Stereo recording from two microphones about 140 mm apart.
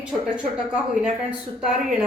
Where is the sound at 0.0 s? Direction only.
5° right (ahead or behind).